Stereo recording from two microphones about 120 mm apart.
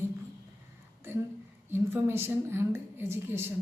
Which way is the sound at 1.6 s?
20° right (ahead or behind).